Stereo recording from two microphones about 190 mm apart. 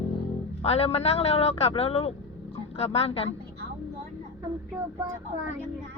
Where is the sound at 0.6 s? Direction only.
30° left (ahead or behind).